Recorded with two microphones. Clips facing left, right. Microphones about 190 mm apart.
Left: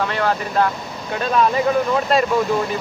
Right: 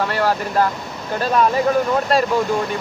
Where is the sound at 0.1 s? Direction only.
5° right (ahead or behind).